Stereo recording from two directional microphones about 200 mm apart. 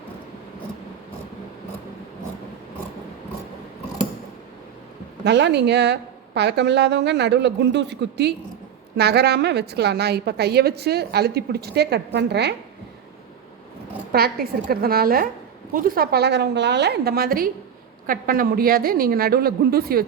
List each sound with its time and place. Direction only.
5.2 s a woman's voice: 60° right (ahead or behind)
14.1 s a woman's voice: 50° right (ahead or behind)